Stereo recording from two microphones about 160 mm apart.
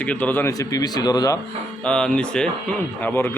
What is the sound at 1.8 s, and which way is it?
Speech, 5° left (ahead or behind).